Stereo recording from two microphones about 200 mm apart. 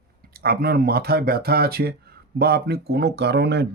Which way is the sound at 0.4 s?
50° right (ahead or behind).